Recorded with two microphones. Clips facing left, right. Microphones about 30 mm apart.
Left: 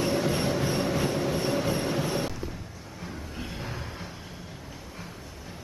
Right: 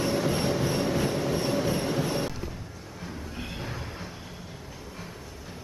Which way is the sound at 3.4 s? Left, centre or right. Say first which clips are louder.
Even; centre.